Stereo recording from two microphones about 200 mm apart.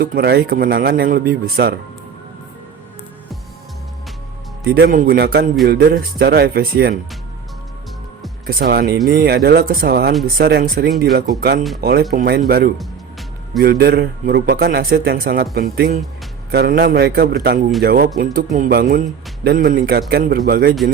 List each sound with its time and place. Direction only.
0.0 s a man's voice: 50° right (ahead or behind)
4.6 s a man's voice: 50° right (ahead or behind)
8.4 s a man's voice: 50° right (ahead or behind)